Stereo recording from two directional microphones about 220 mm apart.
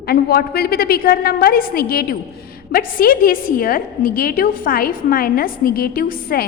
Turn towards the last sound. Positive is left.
turn(degrees=40)  # may be behind; listen again after turning